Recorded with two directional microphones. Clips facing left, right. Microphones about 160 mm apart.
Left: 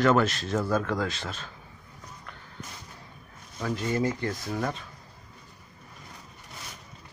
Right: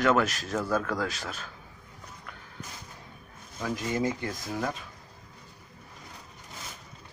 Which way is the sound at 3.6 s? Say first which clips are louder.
Left 2 dB; 10° right (ahead or behind).